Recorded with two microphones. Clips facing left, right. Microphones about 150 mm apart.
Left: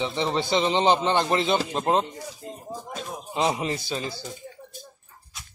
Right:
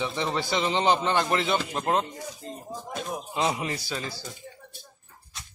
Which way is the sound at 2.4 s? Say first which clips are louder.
Left 1 dB; 10° left (ahead or behind).